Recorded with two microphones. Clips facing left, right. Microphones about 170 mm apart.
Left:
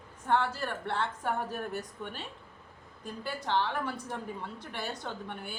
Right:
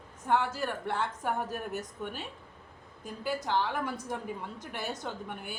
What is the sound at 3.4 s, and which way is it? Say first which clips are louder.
A woman's voice: left 2 dB; 5° right (ahead or behind).